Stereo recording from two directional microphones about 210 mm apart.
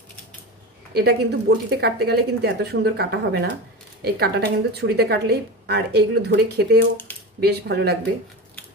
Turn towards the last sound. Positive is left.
turn(degrees=-50)  # may be behind; listen again after turning